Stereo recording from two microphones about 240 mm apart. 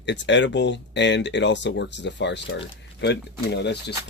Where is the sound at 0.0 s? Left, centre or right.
Left.